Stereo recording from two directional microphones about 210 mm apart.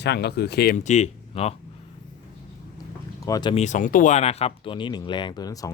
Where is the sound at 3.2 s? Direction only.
20° left (ahead or behind).